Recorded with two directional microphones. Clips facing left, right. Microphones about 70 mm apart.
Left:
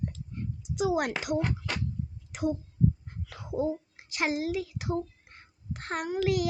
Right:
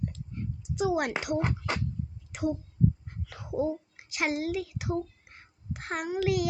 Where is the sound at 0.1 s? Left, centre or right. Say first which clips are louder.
Even; centre.